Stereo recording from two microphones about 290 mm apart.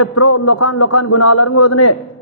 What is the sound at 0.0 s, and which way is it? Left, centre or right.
A man's voice, left.